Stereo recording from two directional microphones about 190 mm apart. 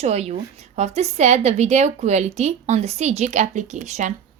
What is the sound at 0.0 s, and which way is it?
A woman's voice, 35° right (ahead or behind).